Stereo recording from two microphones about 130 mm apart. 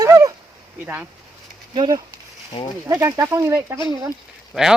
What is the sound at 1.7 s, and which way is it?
Speech, 35° right (ahead or behind).